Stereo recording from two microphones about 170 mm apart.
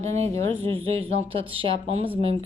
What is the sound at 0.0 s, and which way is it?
Speech, 40° right (ahead or behind).